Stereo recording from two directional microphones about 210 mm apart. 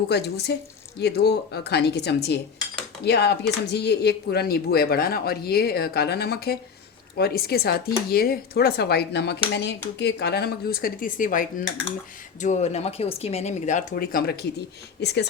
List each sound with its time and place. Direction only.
0.1 s speech: 50° left (ahead or behind)